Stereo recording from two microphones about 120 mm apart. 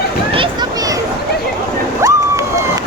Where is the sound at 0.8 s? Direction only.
30° right (ahead or behind).